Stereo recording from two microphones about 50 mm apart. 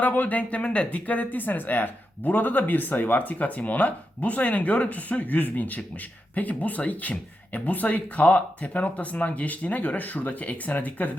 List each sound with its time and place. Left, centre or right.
0.0 s speech: left